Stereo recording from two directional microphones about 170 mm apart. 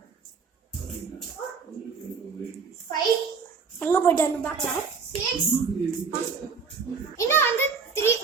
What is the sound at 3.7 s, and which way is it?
Speech, 10° left (ahead or behind).